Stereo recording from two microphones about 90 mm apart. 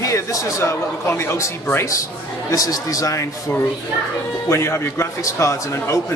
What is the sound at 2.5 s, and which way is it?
Speech, 40° left (ahead or behind).